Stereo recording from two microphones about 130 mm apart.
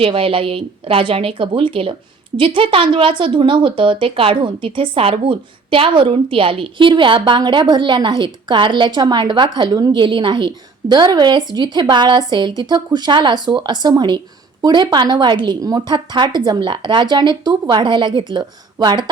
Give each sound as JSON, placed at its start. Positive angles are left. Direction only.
{"t": 0.0, "sound": "a woman's voice", "side_deg": -45}